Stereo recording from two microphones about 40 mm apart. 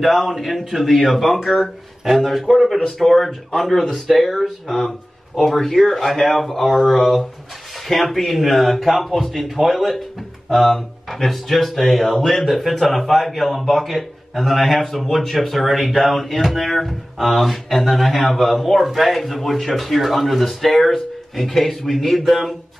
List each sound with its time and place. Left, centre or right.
0.0 s speech: centre